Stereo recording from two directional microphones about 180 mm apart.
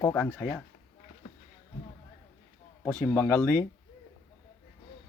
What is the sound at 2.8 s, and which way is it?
Speech, 10° left (ahead or behind).